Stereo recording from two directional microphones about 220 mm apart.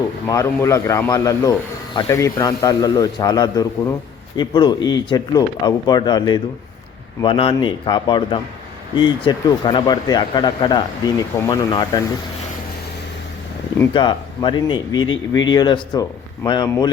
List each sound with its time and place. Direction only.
0.3 s a man's voice: 15° left (ahead or behind)
13.9 s speech: 20° left (ahead or behind)
14.9 s speech: 65° left (ahead or behind)
15.3 s speech: 20° left (ahead or behind)